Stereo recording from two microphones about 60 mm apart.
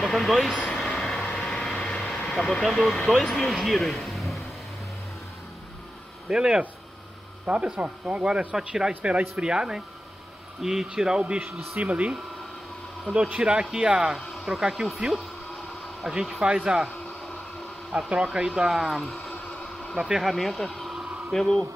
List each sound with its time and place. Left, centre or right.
0.0 s speech: centre
0.7 s vehicle: centre
2.2 s speech: centre
6.2 s speech: centre
18.1 s speech: centre
19.5 s a sound: centre
20.1 s speech: centre